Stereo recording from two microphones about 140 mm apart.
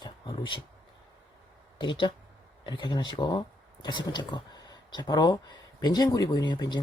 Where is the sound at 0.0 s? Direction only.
35° left (ahead or behind).